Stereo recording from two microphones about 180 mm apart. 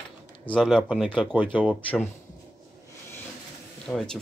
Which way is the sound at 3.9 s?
5° left (ahead or behind).